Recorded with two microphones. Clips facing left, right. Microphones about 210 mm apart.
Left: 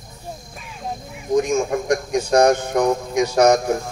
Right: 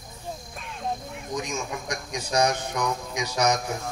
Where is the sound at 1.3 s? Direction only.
50° left (ahead or behind).